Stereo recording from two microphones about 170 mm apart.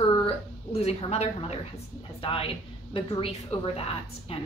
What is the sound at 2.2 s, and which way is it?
Speech, 35° left (ahead or behind).